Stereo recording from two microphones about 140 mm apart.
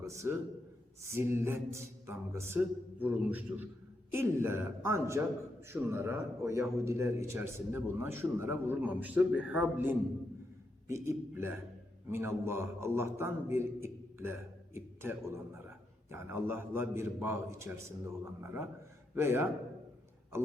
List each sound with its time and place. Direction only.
0.0 s a man's voice: 20° right (ahead or behind)